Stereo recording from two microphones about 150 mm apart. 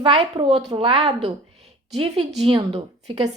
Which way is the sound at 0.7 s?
35° right (ahead or behind).